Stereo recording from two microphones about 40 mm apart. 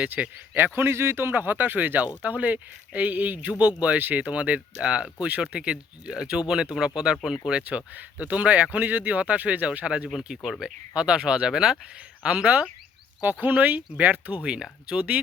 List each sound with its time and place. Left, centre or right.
0.2 s speech: right
0.5 s speech: right
1.3 s speech: right
3.7 s speech: right; by 7.6 s centre
7.6 s speech: right
13.2 s speech: right
14.4 s speech: right